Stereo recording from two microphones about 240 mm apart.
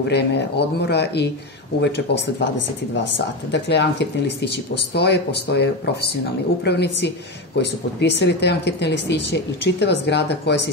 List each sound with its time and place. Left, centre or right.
0.1 s speech: left
3.5 s speech: left